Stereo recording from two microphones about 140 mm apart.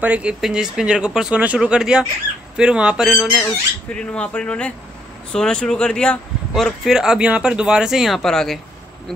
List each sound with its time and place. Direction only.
0.0 s speech: 10° right (ahead or behind)